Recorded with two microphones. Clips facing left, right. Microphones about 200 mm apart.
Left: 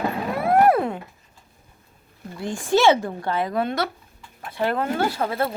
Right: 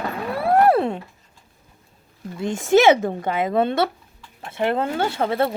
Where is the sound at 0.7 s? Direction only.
25° right (ahead or behind).